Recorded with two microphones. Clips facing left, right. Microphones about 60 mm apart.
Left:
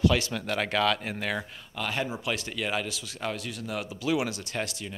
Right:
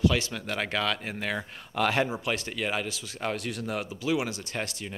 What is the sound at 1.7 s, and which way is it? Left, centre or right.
Speech, right.